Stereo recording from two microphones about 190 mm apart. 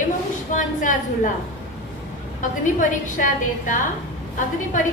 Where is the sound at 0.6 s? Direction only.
45° left (ahead or behind).